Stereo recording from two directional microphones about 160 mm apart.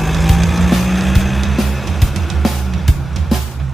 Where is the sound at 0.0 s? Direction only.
Centre (ahead or behind).